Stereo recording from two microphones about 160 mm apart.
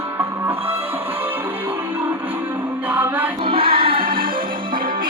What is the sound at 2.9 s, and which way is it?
Music, 10° right (ahead or behind).